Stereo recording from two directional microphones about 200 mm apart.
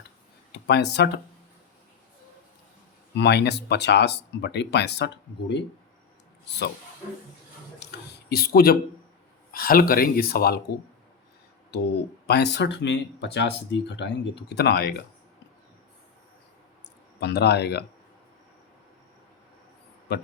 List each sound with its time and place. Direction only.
0.5 s speech: 55° left (ahead or behind)
3.2 s speech: 55° left (ahead or behind)
7.8 s a sound: 55° left (ahead or behind)
9.5 s speech: 45° left (ahead or behind)
11.7 s speech: 55° left (ahead or behind)
17.2 s speech: 55° left (ahead or behind)
20.1 s speech: 55° left (ahead or behind)